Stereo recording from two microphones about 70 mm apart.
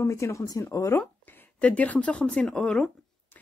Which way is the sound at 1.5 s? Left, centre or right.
Centre.